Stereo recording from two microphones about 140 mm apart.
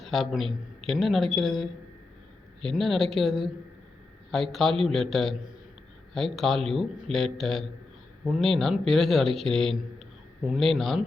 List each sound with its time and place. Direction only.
0.0 s a man's voice: centre (ahead or behind)